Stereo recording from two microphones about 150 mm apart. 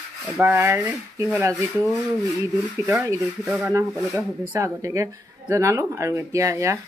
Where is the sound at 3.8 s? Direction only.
15° right (ahead or behind).